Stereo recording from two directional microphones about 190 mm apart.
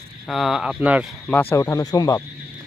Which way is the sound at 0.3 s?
Centre (ahead or behind).